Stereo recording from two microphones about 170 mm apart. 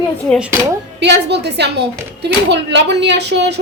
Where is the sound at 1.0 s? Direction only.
85° right.